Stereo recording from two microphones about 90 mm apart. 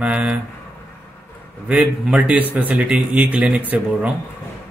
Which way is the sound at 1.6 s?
10° right (ahead or behind).